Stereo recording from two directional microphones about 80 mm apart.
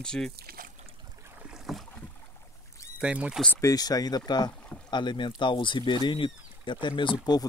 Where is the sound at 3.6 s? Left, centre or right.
Left.